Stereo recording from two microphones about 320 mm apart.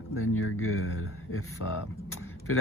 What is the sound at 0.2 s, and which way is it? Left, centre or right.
Speech, left.